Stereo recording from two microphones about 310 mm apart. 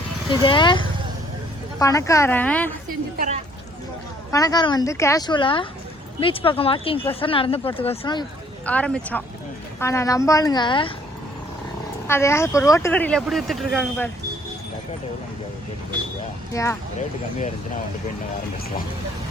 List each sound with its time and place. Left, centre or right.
0.3 s speech: centre
3.2 s speech: right
4.3 s speech: centre
8.6 s speech: centre
12.0 s speech: centre
16.5 s speech: centre